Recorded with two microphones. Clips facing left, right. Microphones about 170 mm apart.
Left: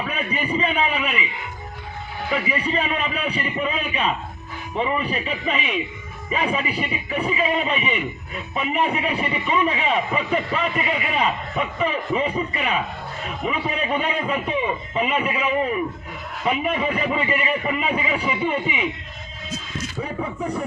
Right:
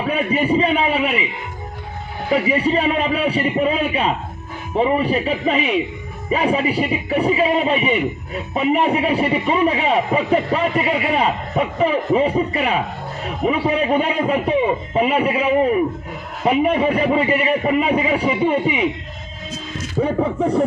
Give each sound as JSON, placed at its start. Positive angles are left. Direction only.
{"t": 0.0, "sound": "a man's voice", "side_deg": -40}
{"t": 0.3, "sound": "a man's voice", "side_deg": -25}
{"t": 2.3, "sound": "a man's voice", "side_deg": -35}
{"t": 20.1, "sound": "speech", "side_deg": -60}